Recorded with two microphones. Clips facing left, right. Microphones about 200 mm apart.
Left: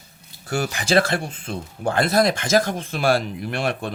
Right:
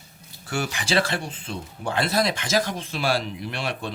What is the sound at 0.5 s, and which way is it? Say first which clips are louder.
Speech: left 4 dB; 45° left (ahead or behind).